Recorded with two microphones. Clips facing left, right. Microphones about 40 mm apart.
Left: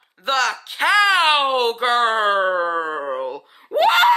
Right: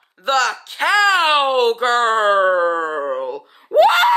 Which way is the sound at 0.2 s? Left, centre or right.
Centre.